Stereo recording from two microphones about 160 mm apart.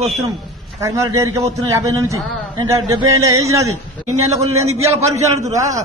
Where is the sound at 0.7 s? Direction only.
20° right (ahead or behind).